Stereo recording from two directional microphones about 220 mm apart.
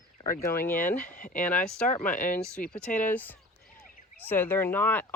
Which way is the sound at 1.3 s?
5° left (ahead or behind).